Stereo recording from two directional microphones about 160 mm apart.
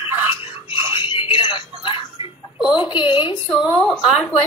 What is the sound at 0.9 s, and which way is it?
Music, 30° left (ahead or behind).